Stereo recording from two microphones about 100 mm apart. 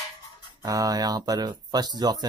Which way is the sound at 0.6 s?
35° right (ahead or behind).